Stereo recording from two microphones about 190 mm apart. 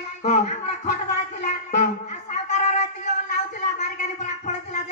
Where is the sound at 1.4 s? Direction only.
40° left (ahead or behind).